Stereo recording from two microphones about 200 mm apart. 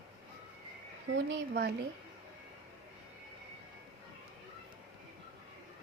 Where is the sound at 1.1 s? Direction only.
60° right (ahead or behind).